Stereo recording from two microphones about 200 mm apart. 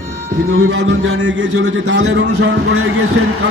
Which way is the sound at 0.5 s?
60° right (ahead or behind).